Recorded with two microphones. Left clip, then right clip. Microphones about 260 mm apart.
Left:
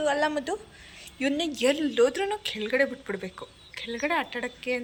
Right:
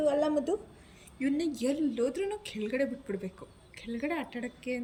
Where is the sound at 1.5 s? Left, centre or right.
Centre.